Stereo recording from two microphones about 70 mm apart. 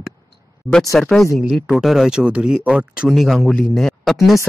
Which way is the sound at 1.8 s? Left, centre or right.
Centre.